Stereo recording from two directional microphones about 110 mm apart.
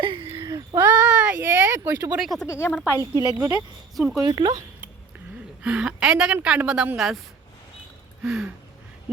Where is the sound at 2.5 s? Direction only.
25° left (ahead or behind).